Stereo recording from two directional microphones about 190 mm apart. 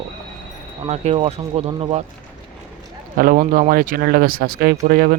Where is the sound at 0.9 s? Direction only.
30° right (ahead or behind).